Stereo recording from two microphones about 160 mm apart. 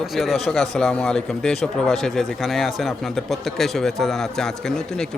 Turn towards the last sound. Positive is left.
turn(degrees=5)  # may be behind; listen again after turning